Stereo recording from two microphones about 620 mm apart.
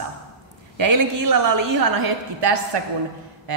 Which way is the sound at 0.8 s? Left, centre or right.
Right.